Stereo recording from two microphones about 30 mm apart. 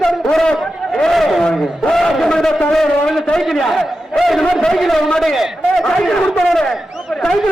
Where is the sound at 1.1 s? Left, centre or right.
Centre.